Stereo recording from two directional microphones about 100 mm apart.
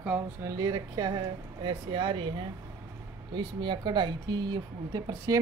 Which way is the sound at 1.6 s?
55° right (ahead or behind).